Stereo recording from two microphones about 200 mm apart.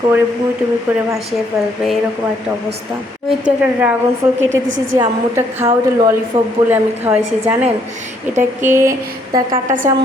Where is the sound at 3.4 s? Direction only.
10° right (ahead or behind).